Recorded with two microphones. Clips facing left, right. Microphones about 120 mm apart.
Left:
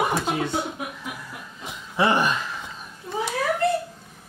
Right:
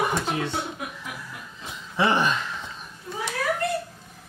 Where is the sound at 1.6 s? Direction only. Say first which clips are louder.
Left 2 dB; 5° left (ahead or behind).